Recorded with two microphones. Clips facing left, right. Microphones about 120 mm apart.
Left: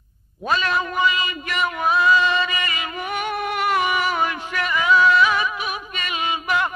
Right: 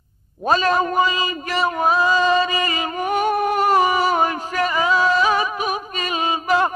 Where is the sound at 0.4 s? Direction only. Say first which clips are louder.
Right 5 dB; 40° right (ahead or behind).